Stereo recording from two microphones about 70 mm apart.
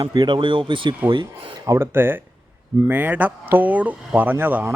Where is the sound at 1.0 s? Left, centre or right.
Right.